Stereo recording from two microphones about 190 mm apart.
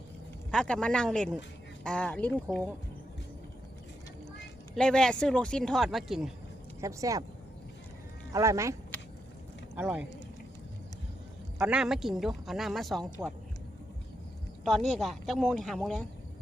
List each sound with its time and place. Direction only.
0.5 s speech: 5° left (ahead or behind)
4.7 s speech: 5° left (ahead or behind)
6.8 s speech: 15° right (ahead or behind)
8.3 s speech: 15° right (ahead or behind)
9.7 s speech: 5° right (ahead or behind)
11.5 s speech: 5° right (ahead or behind)
14.6 s speech: centre (ahead or behind)